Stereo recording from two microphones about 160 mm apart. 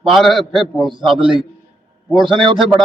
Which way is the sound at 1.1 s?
30° right (ahead or behind).